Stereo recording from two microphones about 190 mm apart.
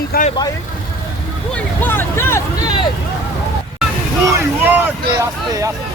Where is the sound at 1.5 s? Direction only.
10° left (ahead or behind).